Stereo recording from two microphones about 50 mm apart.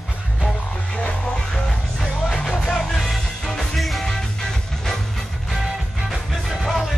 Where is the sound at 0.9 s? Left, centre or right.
Left.